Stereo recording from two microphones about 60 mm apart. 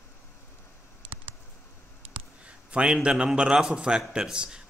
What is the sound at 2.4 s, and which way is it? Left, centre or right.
Speech, centre.